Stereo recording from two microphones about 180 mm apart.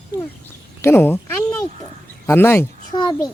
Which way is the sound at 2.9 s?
25° left (ahead or behind).